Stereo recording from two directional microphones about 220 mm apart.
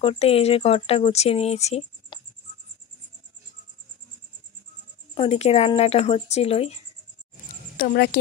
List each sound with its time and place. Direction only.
0.0 s speech: 25° left (ahead or behind)
5.1 s speech: 25° left (ahead or behind)
7.7 s speech: 45° left (ahead or behind)